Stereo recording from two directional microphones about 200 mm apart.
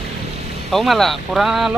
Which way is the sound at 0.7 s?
Centre (ahead or behind).